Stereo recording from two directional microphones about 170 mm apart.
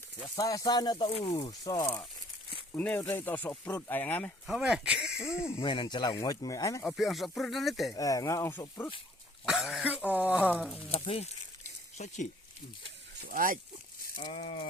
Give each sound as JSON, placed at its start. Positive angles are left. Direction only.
{"t": 0.3, "sound": "speech", "side_deg": 20}
{"t": 4.4, "sound": "speech", "side_deg": -5}
{"t": 5.2, "sound": "speech", "side_deg": 15}
{"t": 5.5, "sound": "speech", "side_deg": 30}
{"t": 6.8, "sound": "speech", "side_deg": 0}
{"t": 7.9, "sound": "speech", "side_deg": 20}
{"t": 9.5, "sound": "speech", "side_deg": 0}
{"t": 10.5, "sound": "speech", "side_deg": 5}
{"t": 10.9, "sound": "speech", "side_deg": 35}
{"t": 13.2, "sound": "speech", "side_deg": -55}
{"t": 14.2, "sound": "speech", "side_deg": 30}